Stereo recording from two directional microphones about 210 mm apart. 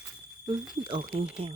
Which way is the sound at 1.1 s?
25° right (ahead or behind).